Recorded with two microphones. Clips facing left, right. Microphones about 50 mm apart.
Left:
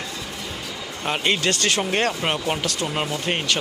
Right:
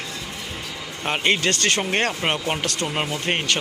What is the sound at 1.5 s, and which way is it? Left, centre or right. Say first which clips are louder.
Speech: even; right.